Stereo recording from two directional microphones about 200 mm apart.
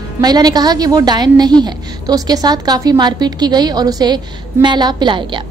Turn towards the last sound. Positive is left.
turn(degrees=-25)  # may be behind; listen again after turning